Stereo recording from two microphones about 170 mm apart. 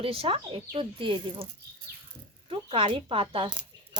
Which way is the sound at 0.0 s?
35° right (ahead or behind).